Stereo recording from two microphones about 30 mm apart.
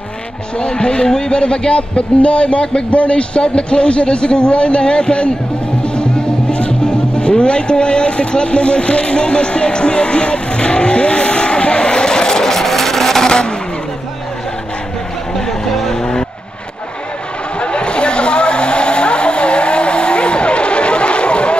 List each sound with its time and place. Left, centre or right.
0.6 s speech: left
1.4 s a man's voice: left
5.9 s music: left
12.4 s vehicle: centre
13.3 s vehicle: left
15.9 s vehicle: left
17.6 s vehicle: left